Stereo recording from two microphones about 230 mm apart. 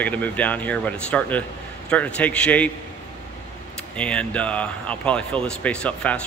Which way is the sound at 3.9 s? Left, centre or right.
Centre.